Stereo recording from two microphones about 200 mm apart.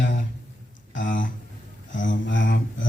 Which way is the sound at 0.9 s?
40° left (ahead or behind).